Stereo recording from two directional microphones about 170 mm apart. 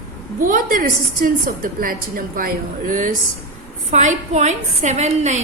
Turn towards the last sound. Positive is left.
turn(degrees=-40)  # may be behind; listen again after turning